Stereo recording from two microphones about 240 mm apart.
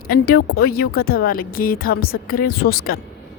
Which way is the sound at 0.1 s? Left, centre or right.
Left.